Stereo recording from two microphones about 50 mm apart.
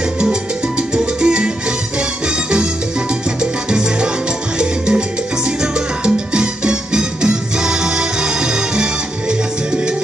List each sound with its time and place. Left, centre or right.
0.2 s music: centre
3.3 s salsa music: centre